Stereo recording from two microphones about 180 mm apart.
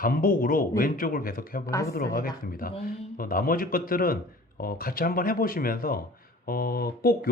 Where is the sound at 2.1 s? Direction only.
50° left (ahead or behind).